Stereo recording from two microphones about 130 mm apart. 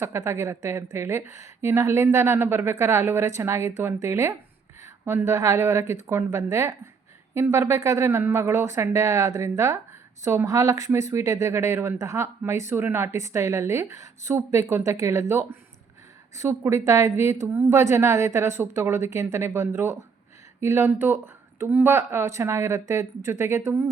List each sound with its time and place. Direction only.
0.0 s speech: 20° right (ahead or behind)